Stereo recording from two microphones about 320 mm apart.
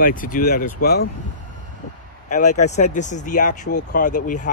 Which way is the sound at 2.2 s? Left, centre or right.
Left.